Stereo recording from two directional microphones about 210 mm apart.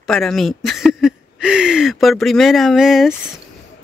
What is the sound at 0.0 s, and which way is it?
Speech, centre (ahead or behind).